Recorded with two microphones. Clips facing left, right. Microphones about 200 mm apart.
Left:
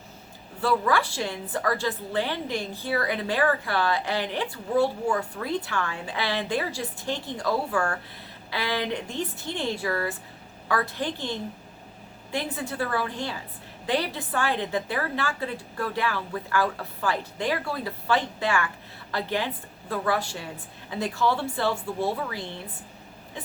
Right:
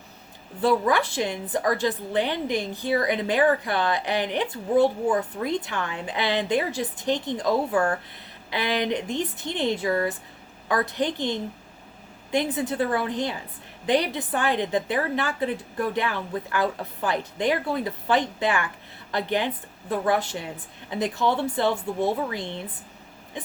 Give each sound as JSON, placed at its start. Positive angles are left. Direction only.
{"t": 0.6, "sound": "a woman's voice", "side_deg": -20}